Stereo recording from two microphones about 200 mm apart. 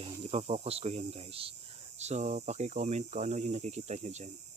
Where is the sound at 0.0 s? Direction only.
30° right (ahead or behind).